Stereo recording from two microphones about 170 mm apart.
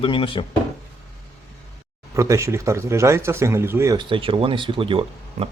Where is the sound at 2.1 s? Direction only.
20° right (ahead or behind).